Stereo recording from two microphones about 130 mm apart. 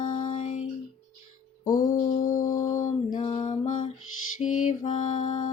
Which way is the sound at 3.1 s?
40° left (ahead or behind).